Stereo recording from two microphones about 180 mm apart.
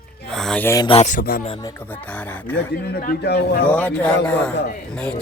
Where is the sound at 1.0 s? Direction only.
50° left (ahead or behind).